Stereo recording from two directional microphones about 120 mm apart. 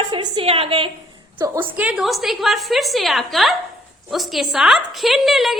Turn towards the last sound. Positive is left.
turn(degrees=0)  # may be behind; listen again after turning